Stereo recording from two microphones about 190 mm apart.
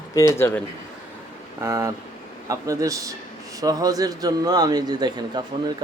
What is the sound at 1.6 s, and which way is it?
A man's voice, 15° right (ahead or behind).